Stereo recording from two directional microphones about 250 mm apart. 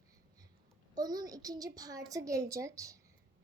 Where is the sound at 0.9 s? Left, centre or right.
Centre.